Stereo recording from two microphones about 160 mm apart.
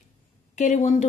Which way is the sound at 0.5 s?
50° left (ahead or behind).